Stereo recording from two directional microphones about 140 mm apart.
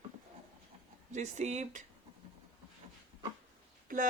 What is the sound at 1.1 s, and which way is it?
Speech, 60° right (ahead or behind).